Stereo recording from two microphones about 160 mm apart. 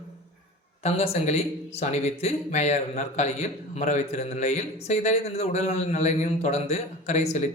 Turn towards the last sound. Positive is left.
turn(degrees=45)  # may be behind; listen again after turning